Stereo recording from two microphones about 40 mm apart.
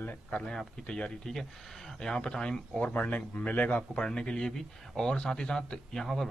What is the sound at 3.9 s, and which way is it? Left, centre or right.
A man's voice, left.